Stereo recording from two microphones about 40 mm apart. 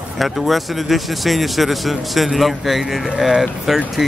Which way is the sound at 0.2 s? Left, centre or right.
Centre.